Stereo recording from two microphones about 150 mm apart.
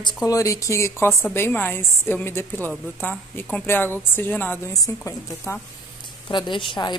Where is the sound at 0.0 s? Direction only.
25° left (ahead or behind).